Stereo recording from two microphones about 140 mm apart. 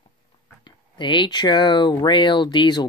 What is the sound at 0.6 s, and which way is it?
Speech, 35° left (ahead or behind).